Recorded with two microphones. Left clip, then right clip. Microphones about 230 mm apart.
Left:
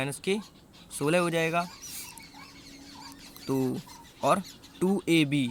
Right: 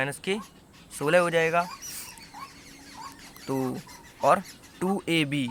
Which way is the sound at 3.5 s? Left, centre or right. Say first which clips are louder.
Even; left.